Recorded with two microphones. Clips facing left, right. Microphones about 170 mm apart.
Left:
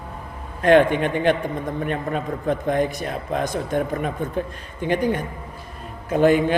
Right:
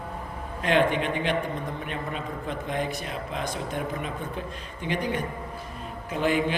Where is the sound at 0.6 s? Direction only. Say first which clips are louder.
Left 8 dB; 50° left (ahead or behind).